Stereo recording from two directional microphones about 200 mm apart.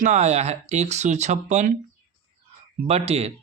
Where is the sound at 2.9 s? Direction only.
30° right (ahead or behind).